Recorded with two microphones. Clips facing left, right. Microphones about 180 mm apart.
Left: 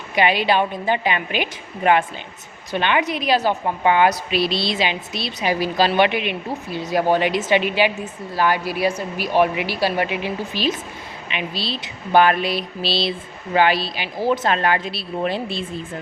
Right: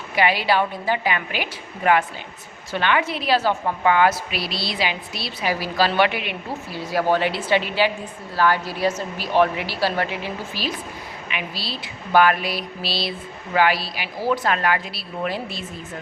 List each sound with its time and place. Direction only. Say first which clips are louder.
0.2 s a woman's voice: left 2 dB; 20° left (ahead or behind)